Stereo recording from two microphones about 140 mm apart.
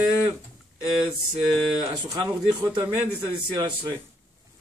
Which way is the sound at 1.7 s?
30° right (ahead or behind).